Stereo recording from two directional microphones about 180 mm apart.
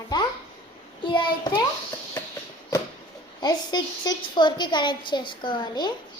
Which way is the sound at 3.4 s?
20° left (ahead or behind).